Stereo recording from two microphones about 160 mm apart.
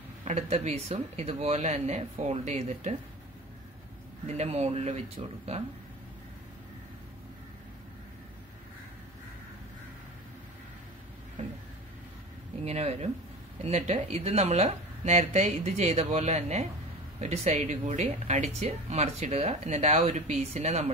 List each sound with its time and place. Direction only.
0.2 s speech: 40° right (ahead or behind)
4.3 s speech: 40° right (ahead or behind)
12.6 s speech: 40° right (ahead or behind)